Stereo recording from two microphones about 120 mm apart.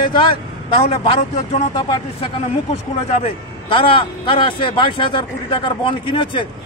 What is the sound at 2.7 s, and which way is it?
A man's voice, 60° left (ahead or behind).